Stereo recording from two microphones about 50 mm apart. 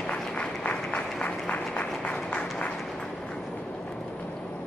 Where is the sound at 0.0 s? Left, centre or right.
Left.